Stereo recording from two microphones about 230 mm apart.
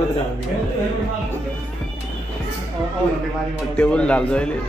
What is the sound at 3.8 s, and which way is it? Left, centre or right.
Speech, centre.